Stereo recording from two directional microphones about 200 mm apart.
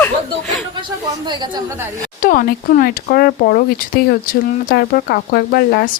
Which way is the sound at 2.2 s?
45° left (ahead or behind).